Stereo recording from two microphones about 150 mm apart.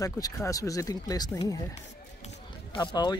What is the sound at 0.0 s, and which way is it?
Speech, 25° left (ahead or behind).